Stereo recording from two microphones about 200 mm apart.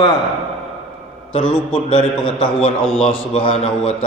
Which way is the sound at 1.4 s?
5° left (ahead or behind).